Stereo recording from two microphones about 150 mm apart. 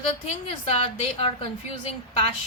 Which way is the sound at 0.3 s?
45° left (ahead or behind).